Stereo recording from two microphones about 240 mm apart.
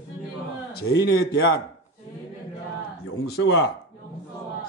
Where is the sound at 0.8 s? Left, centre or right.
Left.